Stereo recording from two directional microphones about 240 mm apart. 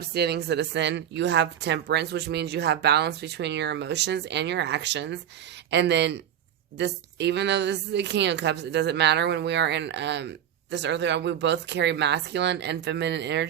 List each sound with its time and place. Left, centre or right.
0.0 s a woman's voice: right